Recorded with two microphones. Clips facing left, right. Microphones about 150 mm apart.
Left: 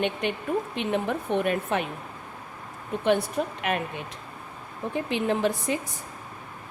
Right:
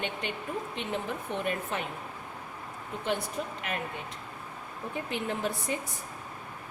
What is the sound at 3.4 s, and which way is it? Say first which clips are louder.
Speech: left 7 dB; 70° left (ahead or behind).